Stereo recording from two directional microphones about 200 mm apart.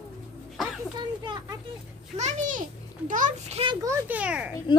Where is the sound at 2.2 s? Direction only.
35° right (ahead or behind).